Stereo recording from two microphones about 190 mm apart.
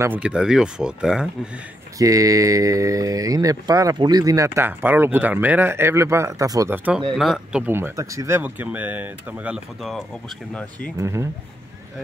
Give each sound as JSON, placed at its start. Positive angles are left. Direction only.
{"t": 0.0, "sound": "speech", "side_deg": -5}
{"t": 2.0, "sound": "speech", "side_deg": -15}
{"t": 11.0, "sound": "speech", "side_deg": -15}